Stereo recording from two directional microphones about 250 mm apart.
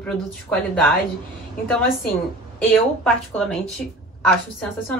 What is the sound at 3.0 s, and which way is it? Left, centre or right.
Speech, centre.